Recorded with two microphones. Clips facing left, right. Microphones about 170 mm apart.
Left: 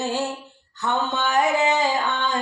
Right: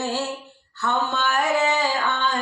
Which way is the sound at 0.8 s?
15° left (ahead or behind).